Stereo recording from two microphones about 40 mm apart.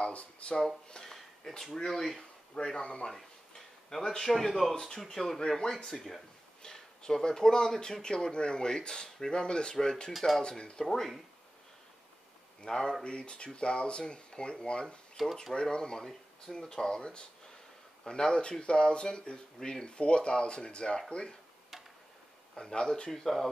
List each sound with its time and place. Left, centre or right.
0.0 s speech: left
1.0 s a sound: centre
1.9 s speech: centre
2.5 s speech: left
3.1 s a sound: centre
4.2 s speech: centre
6.6 s speech: centre
10.1 s speech: centre
10.6 s speech: left
12.6 s speech: centre
15.2 s speech: centre
15.5 s speech: left
22.6 s speech: centre